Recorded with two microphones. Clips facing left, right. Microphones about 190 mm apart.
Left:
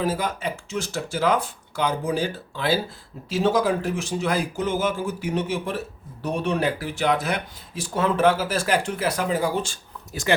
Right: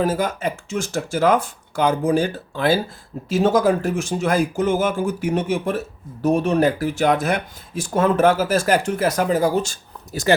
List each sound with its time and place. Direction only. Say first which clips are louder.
0.0 s speech: right 4 dB; 45° right (ahead or behind)